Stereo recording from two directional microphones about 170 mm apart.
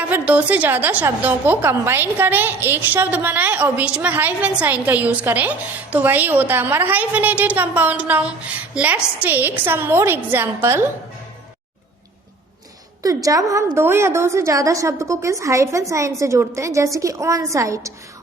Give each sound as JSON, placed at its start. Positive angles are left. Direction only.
{"t": 0.1, "sound": "a woman's voice", "side_deg": -10}
{"t": 13.0, "sound": "a woman's voice", "side_deg": -20}